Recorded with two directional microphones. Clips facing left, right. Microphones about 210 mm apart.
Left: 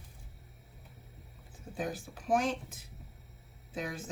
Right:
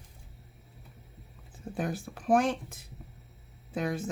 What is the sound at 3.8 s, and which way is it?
Speech, 60° right (ahead or behind).